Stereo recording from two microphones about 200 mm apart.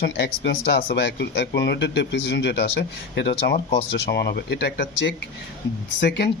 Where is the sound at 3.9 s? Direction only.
55° left (ahead or behind).